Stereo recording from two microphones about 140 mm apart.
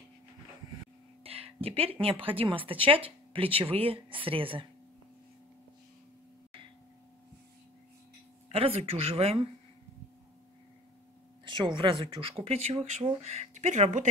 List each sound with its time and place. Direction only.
1.2 s speech: 45° right (ahead or behind)
8.5 s speech: 45° right (ahead or behind)
11.4 s speech: 35° right (ahead or behind); by 14.0 s 60° right (ahead or behind)